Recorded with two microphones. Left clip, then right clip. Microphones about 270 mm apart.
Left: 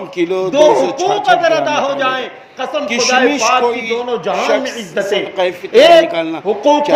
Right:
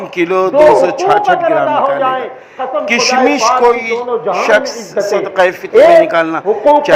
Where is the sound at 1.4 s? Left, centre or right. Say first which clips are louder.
Right 2 dB; left.